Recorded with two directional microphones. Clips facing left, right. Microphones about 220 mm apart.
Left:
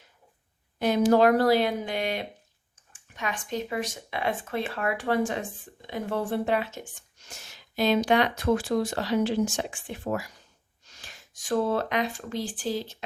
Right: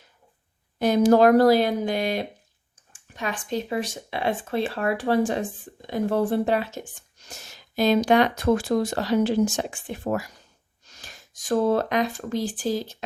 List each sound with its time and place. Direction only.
0.8 s speech: 40° right (ahead or behind)